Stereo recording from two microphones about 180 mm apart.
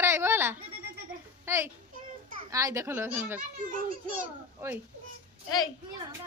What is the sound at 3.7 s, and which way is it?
Speech, 50° right (ahead or behind).